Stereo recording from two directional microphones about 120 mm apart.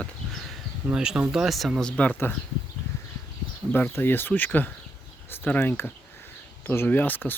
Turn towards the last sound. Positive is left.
turn(degrees=15)  # may be behind; listen again after turning